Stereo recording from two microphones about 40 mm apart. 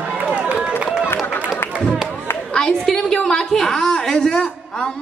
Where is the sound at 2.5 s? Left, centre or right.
Centre.